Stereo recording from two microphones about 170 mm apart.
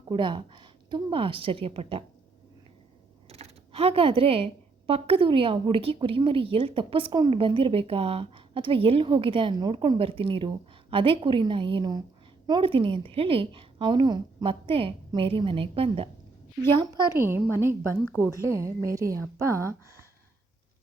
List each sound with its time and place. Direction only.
0.1 s a woman's voice: 30° right (ahead or behind)
3.2 s typing: 35° right (ahead or behind)
4.9 s a woman's voice: 35° right (ahead or behind)
16.8 s a woman's voice: 20° right (ahead or behind)